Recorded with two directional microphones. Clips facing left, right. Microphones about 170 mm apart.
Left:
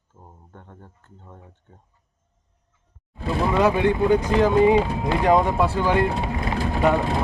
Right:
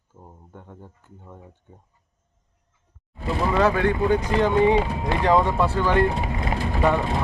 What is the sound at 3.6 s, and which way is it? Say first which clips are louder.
Speech: left 2 dB; 20° left (ahead or behind).